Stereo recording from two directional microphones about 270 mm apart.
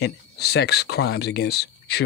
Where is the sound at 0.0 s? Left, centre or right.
Left.